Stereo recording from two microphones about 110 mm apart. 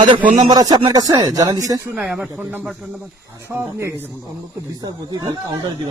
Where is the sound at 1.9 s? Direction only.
20° right (ahead or behind).